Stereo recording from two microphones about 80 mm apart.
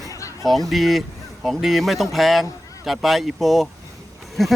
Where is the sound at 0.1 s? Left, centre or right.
Left.